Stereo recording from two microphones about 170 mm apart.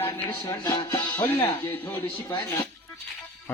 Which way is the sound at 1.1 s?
10° left (ahead or behind).